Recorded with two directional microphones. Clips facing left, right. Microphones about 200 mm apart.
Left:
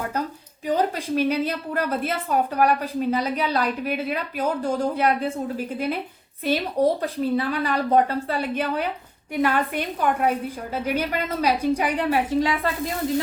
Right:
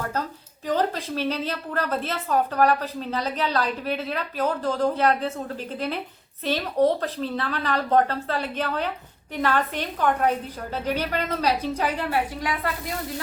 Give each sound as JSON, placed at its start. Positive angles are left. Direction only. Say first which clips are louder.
{"t": 0.7, "sound": "a woman's voice", "louder": "left 2 dB", "side_deg": 10}